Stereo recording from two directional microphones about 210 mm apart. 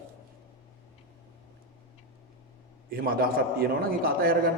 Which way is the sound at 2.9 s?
45° right (ahead or behind).